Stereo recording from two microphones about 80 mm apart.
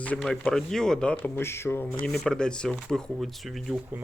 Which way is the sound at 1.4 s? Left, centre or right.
Left.